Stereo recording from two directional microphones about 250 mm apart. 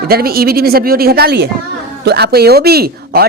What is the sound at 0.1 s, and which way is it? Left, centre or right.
Speech, right.